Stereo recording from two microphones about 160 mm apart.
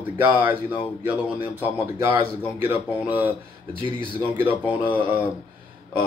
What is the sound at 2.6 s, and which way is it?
Speech, 10° right (ahead or behind).